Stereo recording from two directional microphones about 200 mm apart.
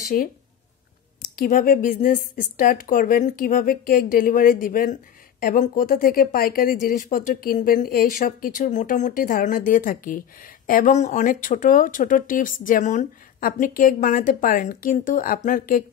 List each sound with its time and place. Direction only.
0.1 s speech: 45° left (ahead or behind)
1.3 s speech: 45° left (ahead or behind)